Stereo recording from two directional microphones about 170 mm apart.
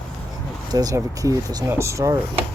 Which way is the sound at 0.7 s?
20° right (ahead or behind).